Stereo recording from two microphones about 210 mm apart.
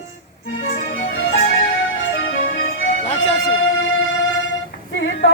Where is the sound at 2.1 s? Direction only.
65° left (ahead or behind).